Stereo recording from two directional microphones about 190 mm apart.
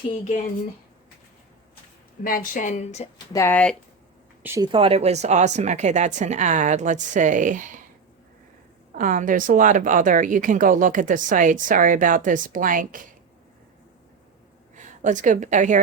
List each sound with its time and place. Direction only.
2.2 s speech: 45° left (ahead or behind)
3.3 s speech: 10° left (ahead or behind)
4.4 s speech: 15° right (ahead or behind)
4.7 s a woman's voice: 30° right (ahead or behind)
9.0 s speech: 45° right (ahead or behind)
14.8 s a woman's voice: 40° right (ahead or behind)